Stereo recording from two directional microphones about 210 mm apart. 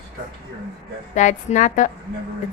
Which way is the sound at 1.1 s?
35° left (ahead or behind).